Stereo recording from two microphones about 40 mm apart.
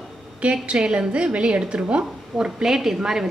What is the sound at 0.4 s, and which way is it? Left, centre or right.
A woman's voice, right.